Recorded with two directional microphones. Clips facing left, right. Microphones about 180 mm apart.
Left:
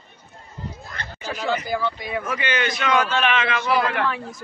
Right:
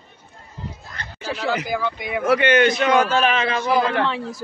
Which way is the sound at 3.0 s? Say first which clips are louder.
Right 3 dB; 40° right (ahead or behind).